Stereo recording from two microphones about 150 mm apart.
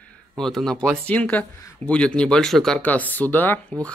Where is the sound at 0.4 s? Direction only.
5° left (ahead or behind).